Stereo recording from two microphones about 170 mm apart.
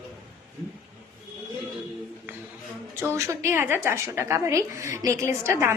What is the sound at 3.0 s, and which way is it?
A woman's voice, 15° right (ahead or behind).